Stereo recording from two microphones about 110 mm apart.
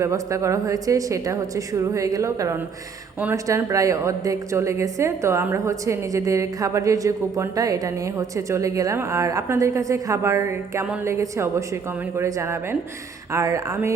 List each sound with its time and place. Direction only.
0.0 s a woman's voice: 30° right (ahead or behind)